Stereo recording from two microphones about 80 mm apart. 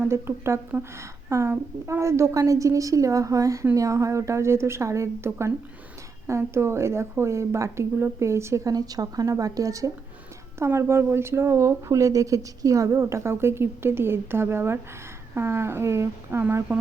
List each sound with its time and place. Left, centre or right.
0.1 s a woman's voice: right
8.7 s a woman's voice: right
10.6 s speech: right